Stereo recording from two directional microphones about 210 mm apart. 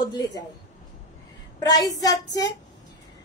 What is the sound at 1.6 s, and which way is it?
Child singing, 15° left (ahead or behind).